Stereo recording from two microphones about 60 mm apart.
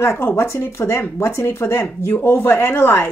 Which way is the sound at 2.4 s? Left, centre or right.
Left.